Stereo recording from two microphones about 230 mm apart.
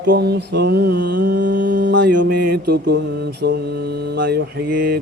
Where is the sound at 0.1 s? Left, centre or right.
Right.